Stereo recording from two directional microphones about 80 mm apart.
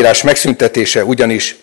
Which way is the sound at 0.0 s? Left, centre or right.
Centre.